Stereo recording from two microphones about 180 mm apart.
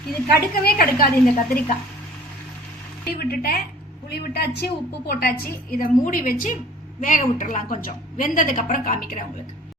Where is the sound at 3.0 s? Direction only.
60° left (ahead or behind).